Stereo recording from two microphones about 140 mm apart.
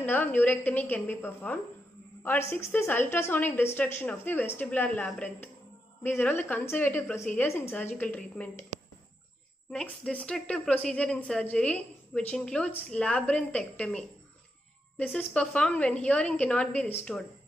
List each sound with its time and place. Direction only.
0.0 s speech: 15° left (ahead or behind)
9.7 s speech: 5° left (ahead or behind)
15.1 s speech: 5° left (ahead or behind)